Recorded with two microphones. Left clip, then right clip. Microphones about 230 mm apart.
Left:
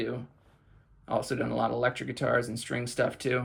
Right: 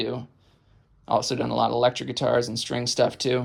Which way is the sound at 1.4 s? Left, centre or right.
Right.